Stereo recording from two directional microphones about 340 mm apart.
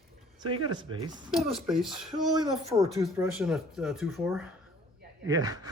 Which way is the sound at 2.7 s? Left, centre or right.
Centre.